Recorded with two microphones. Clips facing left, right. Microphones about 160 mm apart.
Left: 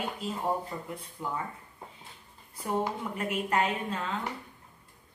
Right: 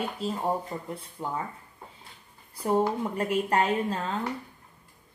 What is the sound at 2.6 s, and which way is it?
A woman's voice, 35° right (ahead or behind).